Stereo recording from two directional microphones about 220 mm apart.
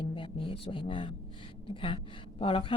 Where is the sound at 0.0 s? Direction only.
25° left (ahead or behind).